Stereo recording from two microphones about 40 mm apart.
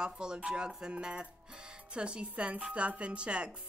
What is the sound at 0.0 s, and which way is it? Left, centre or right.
Speech, centre.